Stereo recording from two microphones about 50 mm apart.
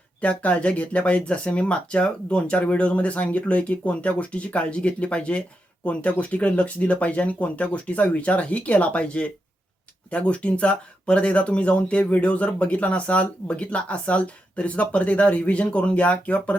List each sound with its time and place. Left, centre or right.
0.2 s speech: left